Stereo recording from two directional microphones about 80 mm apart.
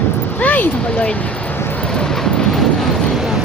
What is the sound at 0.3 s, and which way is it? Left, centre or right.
Speech, centre.